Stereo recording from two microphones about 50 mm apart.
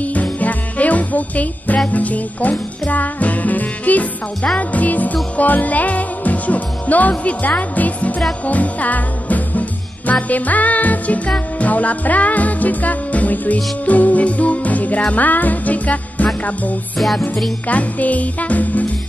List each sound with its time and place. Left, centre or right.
0.0 s music: left
17.6 s music: left